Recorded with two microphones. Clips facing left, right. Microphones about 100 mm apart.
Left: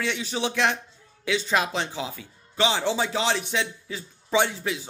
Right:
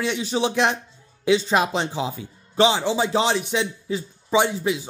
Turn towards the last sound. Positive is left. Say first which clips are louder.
# right 4 dB
turn(degrees=-10)  # may be behind; listen again after turning